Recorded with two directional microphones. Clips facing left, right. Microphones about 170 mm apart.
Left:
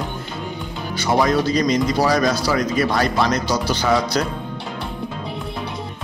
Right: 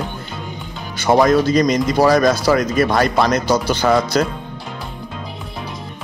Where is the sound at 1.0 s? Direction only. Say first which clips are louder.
Right 5 dB; 50° right (ahead or behind).